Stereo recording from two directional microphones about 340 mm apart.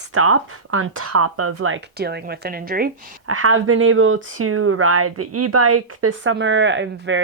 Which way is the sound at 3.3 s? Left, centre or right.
Right.